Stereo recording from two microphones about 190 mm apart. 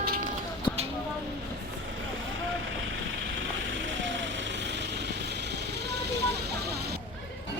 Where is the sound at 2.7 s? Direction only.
80° right; by 6.1 s 60° right (ahead or behind).